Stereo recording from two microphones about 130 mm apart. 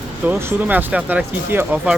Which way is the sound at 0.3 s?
15° right (ahead or behind).